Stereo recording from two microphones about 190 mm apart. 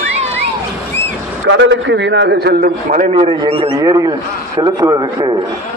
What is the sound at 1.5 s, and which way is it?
A man's voice, 70° right (ahead or behind).